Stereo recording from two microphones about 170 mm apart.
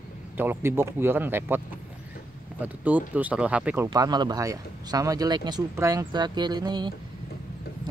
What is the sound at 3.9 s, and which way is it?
Speech, 25° right (ahead or behind).